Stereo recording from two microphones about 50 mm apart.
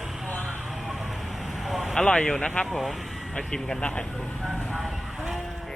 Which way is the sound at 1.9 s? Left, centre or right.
Centre.